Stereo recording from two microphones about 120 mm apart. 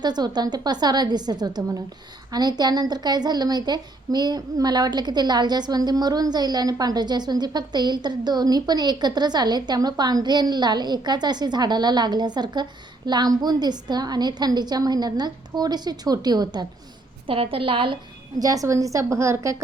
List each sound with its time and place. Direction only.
0.0 s a woman's voice: 35° right (ahead or behind)
17.2 s a woman's voice: 50° right (ahead or behind)
18.3 s a woman's voice: 30° right (ahead or behind)